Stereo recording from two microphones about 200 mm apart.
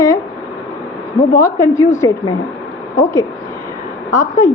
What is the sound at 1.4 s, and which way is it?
Speech, 15° left (ahead or behind).